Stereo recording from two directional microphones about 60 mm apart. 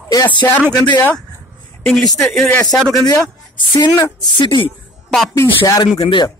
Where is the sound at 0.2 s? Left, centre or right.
Left.